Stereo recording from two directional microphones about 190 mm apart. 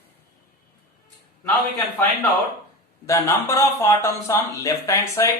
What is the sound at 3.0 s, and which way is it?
Speech, 15° left (ahead or behind).